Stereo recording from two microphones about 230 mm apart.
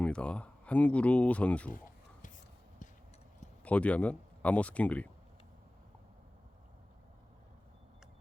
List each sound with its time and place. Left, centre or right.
0.0 s speech: centre
1.7 s a sound: left
3.6 s speech: centre